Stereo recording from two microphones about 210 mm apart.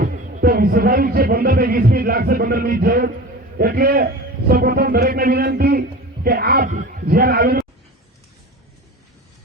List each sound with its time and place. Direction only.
0.0 s a man's voice: 45° right (ahead or behind)